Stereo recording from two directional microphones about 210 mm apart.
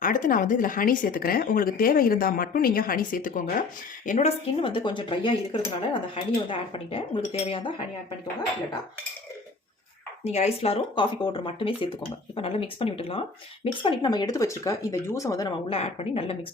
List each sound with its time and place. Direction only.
0.0 s speech: 40° left (ahead or behind)
4.6 s speech: 25° left (ahead or behind)
10.2 s speech: 30° left (ahead or behind)